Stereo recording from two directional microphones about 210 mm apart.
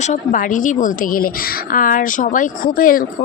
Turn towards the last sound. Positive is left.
turn(degrees=40)  # may be behind; listen again after turning